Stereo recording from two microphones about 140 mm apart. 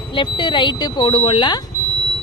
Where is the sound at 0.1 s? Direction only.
35° left (ahead or behind).